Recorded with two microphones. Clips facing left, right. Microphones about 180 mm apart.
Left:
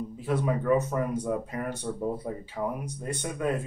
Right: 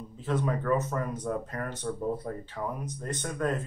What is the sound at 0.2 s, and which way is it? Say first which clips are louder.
Speech: left 1 dB; 10° left (ahead or behind).